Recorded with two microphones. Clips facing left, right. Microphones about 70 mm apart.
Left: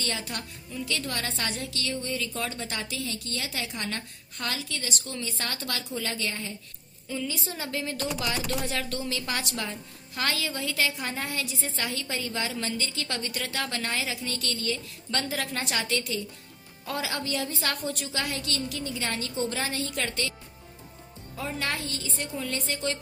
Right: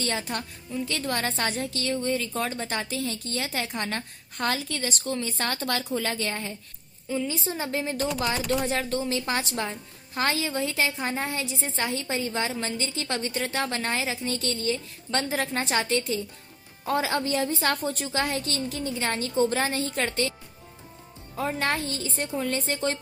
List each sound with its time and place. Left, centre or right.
0.0 s a woman's voice: right
7.1 s a woman's voice: right
21.3 s a woman's voice: right